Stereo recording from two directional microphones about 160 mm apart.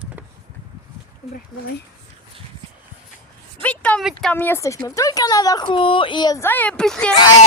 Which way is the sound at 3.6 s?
10° left (ahead or behind).